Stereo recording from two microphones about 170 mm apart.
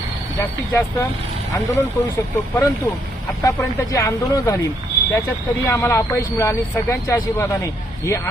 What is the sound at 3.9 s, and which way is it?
Speech, 20° left (ahead or behind).